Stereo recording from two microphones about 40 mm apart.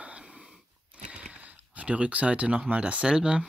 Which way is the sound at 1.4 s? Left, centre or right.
Right.